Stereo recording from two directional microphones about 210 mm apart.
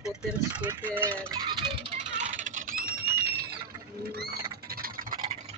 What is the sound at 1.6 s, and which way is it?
Music, 25° right (ahead or behind).